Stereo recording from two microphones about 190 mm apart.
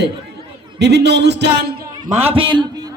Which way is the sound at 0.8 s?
65° right (ahead or behind).